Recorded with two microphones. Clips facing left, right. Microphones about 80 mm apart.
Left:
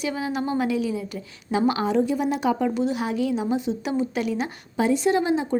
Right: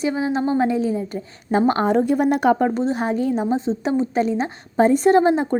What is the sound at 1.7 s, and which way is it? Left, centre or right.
A woman's voice, right.